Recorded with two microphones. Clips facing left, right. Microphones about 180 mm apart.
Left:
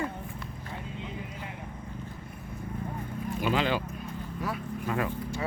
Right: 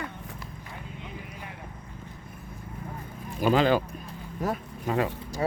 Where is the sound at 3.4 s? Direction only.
40° right (ahead or behind).